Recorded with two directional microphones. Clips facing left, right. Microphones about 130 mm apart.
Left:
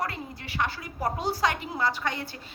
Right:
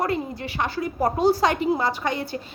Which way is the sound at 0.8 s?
35° right (ahead or behind).